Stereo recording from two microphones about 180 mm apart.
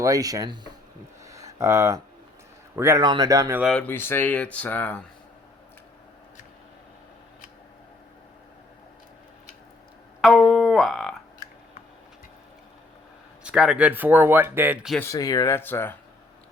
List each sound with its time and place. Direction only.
0.0 s speech: 20° right (ahead or behind)
1.2 s a sound: 15° right (ahead or behind)
2.7 s speech: 15° right (ahead or behind)
3.6 s speech: 5° left (ahead or behind)
10.2 s music: centre (ahead or behind)
13.4 s speech: 5° right (ahead or behind)
15.0 s speech: 20° left (ahead or behind)